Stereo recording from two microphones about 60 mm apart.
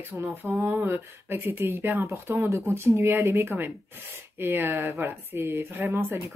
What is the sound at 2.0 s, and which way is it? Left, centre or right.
Speech, right.